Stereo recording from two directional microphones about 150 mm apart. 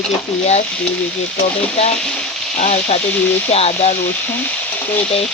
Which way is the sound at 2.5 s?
60° left (ahead or behind).